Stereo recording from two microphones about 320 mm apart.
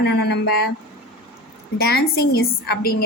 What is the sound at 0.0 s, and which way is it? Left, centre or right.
Speech, left.